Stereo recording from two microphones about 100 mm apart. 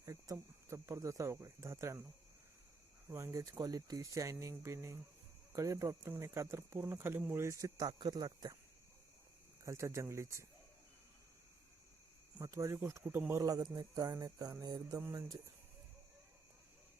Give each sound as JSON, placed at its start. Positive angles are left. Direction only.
{"t": 0.0, "sound": "speech", "side_deg": -30}
{"t": 3.1, "sound": "speech", "side_deg": -25}
{"t": 9.6, "sound": "speech", "side_deg": -30}
{"t": 12.4, "sound": "speech", "side_deg": -30}
{"t": 13.3, "sound": "speech", "side_deg": -35}